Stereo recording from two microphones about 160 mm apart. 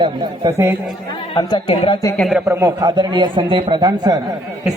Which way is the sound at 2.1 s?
Centre (ahead or behind).